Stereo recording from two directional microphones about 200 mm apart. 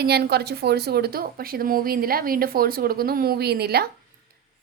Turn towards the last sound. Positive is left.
turn(degrees=-55)  # may be behind; listen again after turning